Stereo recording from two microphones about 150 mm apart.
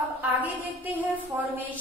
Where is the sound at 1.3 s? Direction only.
15° right (ahead or behind).